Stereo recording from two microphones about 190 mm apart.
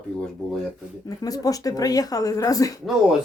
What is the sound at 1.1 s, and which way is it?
Speech, 20° left (ahead or behind).